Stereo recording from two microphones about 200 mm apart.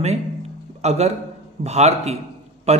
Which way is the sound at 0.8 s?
35° right (ahead or behind).